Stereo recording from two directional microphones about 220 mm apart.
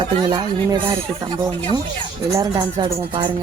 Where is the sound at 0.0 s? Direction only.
20° right (ahead or behind).